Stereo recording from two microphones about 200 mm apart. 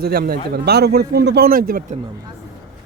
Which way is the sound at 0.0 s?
50° right (ahead or behind).